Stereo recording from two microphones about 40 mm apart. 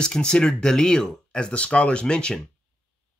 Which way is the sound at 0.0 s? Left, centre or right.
Left.